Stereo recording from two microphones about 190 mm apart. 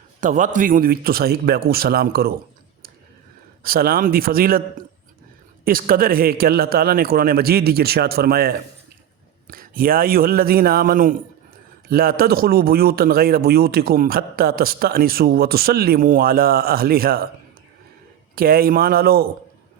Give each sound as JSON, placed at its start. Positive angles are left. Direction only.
{"t": 0.2, "sound": "speech", "side_deg": -40}
{"t": 3.6, "sound": "speech", "side_deg": -50}
{"t": 5.6, "sound": "speech", "side_deg": -50}
{"t": 18.3, "sound": "speech", "side_deg": -50}